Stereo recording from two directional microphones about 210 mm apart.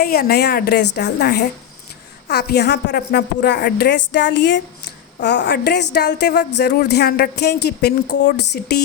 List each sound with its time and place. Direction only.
0.0 s speech: 50° left (ahead or behind)